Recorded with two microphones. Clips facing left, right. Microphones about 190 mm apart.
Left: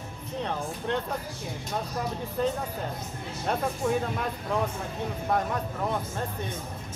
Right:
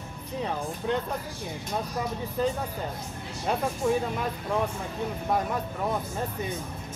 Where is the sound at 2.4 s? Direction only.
Centre (ahead or behind).